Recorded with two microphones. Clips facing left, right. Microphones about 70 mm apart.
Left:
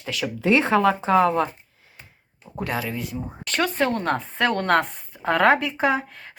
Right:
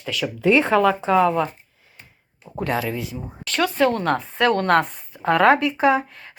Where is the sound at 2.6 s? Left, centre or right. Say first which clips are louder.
Right 3 dB; centre.